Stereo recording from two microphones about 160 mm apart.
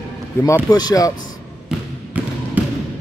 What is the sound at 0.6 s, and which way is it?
Speech, 25° left (ahead or behind).